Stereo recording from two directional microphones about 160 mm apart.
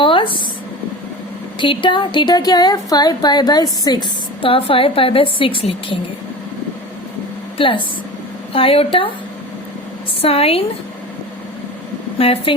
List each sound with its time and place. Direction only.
0.0 s a sound: 30° left (ahead or behind)
1.5 s speech: 30° left (ahead or behind)
4.4 s a woman's voice: 35° left (ahead or behind)
8.5 s a woman's voice: 35° left (ahead or behind)
10.2 s a woman's voice: 40° left (ahead or behind)
12.2 s a woman's voice: 35° left (ahead or behind)